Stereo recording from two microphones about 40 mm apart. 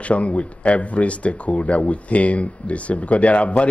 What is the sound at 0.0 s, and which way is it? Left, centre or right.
Speech, left.